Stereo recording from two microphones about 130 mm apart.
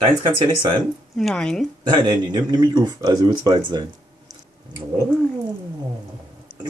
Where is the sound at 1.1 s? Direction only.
5° left (ahead or behind).